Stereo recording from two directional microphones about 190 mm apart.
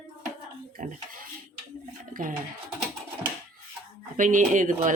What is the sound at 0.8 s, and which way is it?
Speech, 45° right (ahead or behind).